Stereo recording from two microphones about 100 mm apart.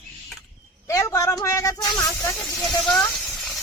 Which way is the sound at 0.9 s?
35° left (ahead or behind).